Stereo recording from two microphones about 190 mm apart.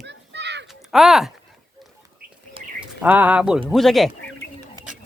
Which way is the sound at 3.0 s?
10° right (ahead or behind).